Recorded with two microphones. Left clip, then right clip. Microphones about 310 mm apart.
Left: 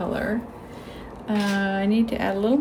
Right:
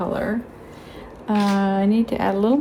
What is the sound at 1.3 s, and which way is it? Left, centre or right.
Speech, centre.